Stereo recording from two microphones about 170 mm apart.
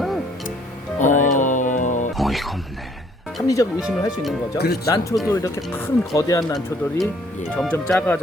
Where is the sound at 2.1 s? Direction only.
Centre (ahead or behind).